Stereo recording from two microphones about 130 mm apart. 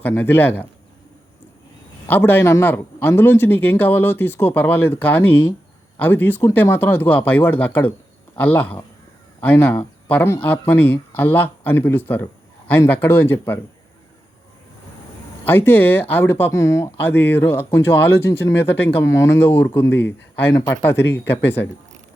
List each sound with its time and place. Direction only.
0.0 s speech: 15° left (ahead or behind)
2.0 s speech: 15° left (ahead or behind)
15.4 s speech: 15° left (ahead or behind)